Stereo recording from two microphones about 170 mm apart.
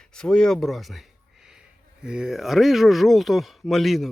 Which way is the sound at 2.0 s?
5° right (ahead or behind).